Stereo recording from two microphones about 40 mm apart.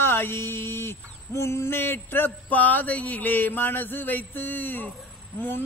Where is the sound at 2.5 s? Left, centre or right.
Left.